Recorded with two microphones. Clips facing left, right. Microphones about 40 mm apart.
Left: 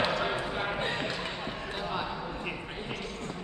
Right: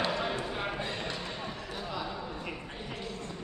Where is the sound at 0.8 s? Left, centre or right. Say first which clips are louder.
Left 4 dB; left.